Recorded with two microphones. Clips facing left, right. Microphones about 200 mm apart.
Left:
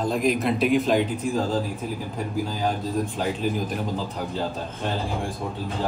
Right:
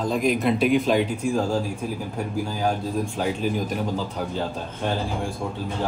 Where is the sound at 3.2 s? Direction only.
Centre (ahead or behind).